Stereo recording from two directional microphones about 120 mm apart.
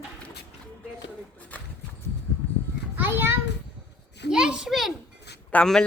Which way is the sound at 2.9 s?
20° right (ahead or behind).